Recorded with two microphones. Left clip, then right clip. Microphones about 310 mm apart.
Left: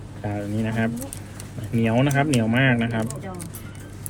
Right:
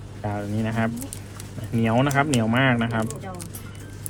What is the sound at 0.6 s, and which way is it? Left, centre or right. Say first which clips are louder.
A man's voice: even; right.